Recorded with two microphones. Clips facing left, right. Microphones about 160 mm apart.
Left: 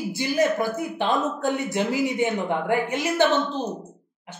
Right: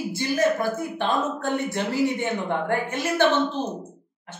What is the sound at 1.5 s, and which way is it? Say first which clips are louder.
Speech: left 1 dB; 10° left (ahead or behind).